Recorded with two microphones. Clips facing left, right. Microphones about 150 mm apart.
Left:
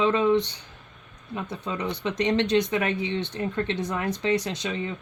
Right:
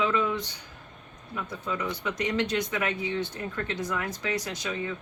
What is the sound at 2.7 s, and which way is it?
Speech, 25° left (ahead or behind).